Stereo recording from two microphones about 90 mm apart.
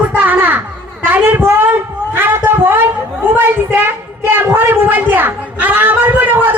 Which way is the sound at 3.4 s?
20° right (ahead or behind).